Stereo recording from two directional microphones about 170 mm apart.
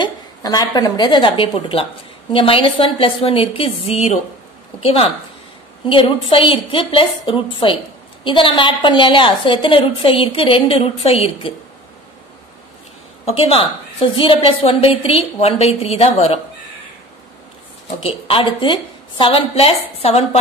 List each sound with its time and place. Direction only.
0.0 s a woman's voice: 25° left (ahead or behind)
13.2 s a woman's voice: 35° left (ahead or behind)
17.8 s a woman's voice: 35° left (ahead or behind)